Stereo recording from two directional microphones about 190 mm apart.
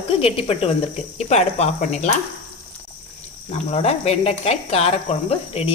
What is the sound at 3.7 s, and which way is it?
A woman's voice, 35° left (ahead or behind).